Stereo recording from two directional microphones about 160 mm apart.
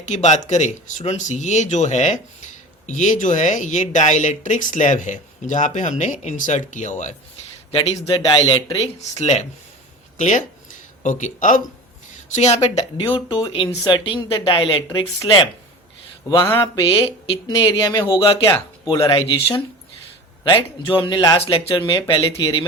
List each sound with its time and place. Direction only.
0.0 s speech: 45° left (ahead or behind)
7.7 s speech: 35° left (ahead or behind)
8.8 s speech: 40° left (ahead or behind)
12.7 s speech: 30° left (ahead or behind)
16.4 s speech: 15° left (ahead or behind); by 18.5 s 35° left (ahead or behind)
18.5 s speech: 20° left (ahead or behind)
20.4 s speech: 30° left (ahead or behind)
21.8 s speech: 25° left (ahead or behind)